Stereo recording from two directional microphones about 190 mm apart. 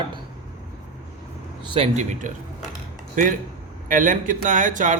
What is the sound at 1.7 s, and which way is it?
A man's voice, 35° right (ahead or behind).